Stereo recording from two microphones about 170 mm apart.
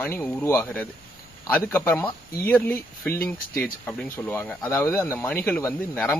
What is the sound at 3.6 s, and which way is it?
Speech, 10° left (ahead or behind).